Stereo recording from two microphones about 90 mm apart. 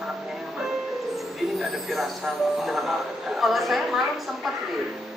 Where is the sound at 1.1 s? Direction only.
Centre (ahead or behind).